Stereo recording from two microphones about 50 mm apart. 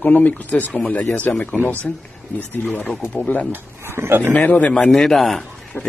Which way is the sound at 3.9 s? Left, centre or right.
Right.